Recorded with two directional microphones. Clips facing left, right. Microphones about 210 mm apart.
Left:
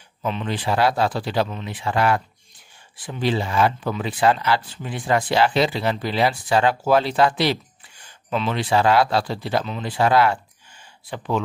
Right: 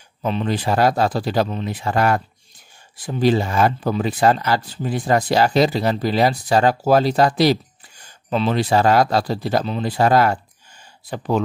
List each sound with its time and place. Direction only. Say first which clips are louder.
0.2 s speech: right 4 dB; 35° right (ahead or behind)